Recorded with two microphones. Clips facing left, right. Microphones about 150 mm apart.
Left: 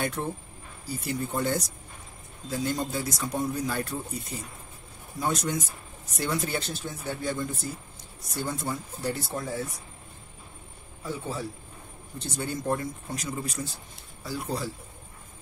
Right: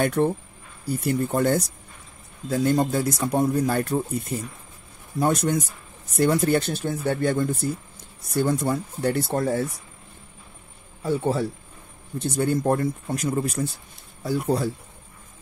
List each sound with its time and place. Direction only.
0.0 s a man's voice: 65° right (ahead or behind)
11.1 s a man's voice: 70° right (ahead or behind)
12.2 s a man's voice: 55° right (ahead or behind)